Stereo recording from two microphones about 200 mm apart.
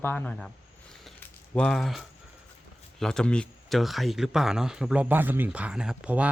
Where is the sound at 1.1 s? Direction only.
5° left (ahead or behind).